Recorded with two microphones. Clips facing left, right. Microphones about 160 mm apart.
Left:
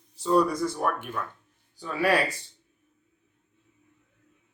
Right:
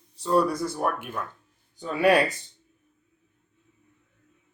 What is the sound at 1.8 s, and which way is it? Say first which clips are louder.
Speech: right 4 dB; 20° right (ahead or behind).